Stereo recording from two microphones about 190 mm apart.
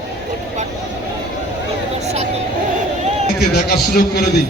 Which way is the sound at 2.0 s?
35° right (ahead or behind).